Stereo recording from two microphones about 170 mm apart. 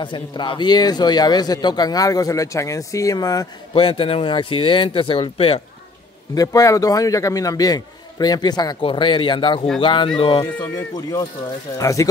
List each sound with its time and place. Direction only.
0.0 s a man's voice: 30° left (ahead or behind)
6.3 s a man's voice: 20° left (ahead or behind)